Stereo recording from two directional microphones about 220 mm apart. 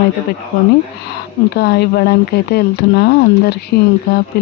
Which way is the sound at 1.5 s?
45° left (ahead or behind).